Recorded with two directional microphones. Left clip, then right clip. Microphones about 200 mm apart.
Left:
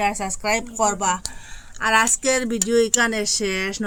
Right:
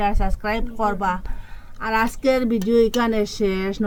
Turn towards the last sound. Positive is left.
turn(degrees=20)  # may be behind; listen again after turning